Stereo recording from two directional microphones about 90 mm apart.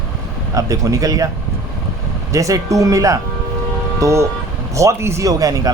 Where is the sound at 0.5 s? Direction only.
40° right (ahead or behind).